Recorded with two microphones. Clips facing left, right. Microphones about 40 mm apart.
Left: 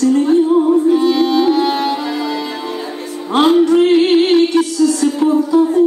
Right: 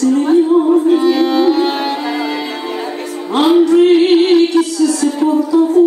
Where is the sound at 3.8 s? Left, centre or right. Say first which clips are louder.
Right 2 dB; right.